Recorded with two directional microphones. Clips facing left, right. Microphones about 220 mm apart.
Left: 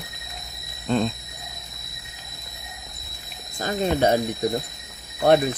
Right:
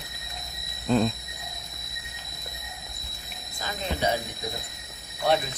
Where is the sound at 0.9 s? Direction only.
5° right (ahead or behind).